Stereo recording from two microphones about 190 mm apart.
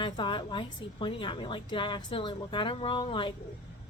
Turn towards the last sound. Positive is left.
turn(degrees=25)  # may be behind; listen again after turning